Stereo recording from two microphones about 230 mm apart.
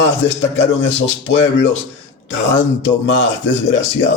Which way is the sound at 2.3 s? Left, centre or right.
Left.